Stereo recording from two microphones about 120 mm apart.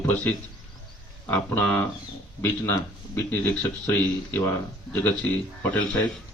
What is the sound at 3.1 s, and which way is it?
Speech, 15° left (ahead or behind).